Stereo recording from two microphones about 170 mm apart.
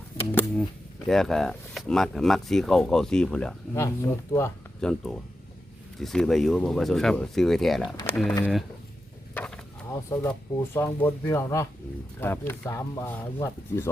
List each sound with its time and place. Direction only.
0.3 s speech: 10° left (ahead or behind)
3.8 s speech: 15° left (ahead or behind)
4.8 s speech: 5° left (ahead or behind)
9.3 s a sound: 5° left (ahead or behind)
9.9 s speech: 15° left (ahead or behind)